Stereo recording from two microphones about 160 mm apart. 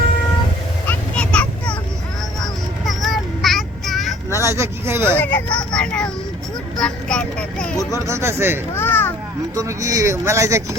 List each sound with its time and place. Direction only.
0.9 s vehicle: 5° left (ahead or behind)
2.8 s child singing: centre (ahead or behind)
4.4 s speech: 15° right (ahead or behind)
5.2 s speech: 10° left (ahead or behind)
7.8 s speech: 20° left (ahead or behind)
8.0 s speech: 15° right (ahead or behind)
8.7 s a sound: 10° left (ahead or behind)
9.6 s speech: 20° right (ahead or behind)